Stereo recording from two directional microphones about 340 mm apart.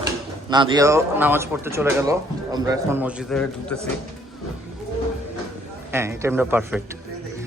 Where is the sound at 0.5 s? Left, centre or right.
Centre.